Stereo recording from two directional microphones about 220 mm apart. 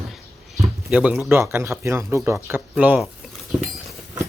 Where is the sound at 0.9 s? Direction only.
5° right (ahead or behind).